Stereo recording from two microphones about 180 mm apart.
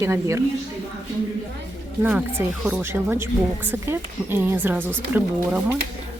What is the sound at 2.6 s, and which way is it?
Speech, 10° right (ahead or behind).